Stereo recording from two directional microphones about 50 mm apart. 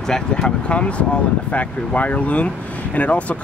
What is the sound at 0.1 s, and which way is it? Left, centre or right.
Speech, centre.